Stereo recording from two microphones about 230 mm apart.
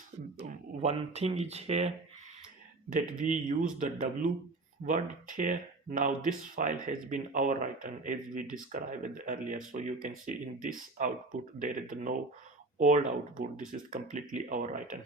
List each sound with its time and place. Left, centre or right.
0.8 s speech: right
2.9 s speech: right